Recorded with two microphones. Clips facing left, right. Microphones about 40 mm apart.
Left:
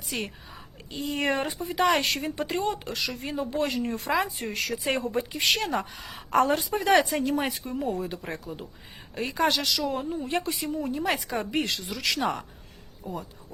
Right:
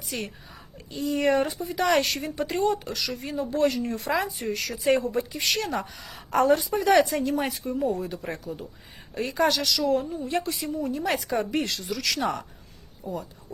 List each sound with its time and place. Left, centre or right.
1.0 s a woman's voice: left
2.5 s speech: centre
2.7 s a woman's voice: left
5.8 s speech: centre
6.1 s a woman's voice: left
7.3 s speech: centre
7.9 s a woman's voice: left
9.1 s speech: centre
10.1 s a woman's voice: left
11.0 s speech: centre; by 12.2 s left